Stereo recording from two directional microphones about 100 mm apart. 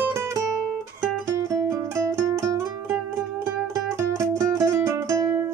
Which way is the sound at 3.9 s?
35° right (ahead or behind).